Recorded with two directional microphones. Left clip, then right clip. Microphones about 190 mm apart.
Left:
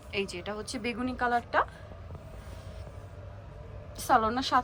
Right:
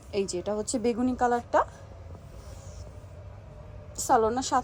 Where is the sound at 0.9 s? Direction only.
25° right (ahead or behind).